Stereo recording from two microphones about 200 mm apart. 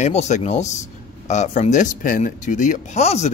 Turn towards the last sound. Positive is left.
turn(degrees=35)  # may be behind; listen again after turning